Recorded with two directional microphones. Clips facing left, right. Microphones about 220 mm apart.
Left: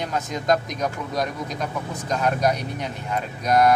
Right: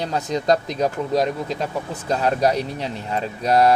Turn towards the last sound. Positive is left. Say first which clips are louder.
# right 2 dB
turn(degrees=-30)  # may be behind; listen again after turning